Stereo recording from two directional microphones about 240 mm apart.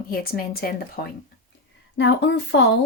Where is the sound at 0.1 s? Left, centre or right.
Left.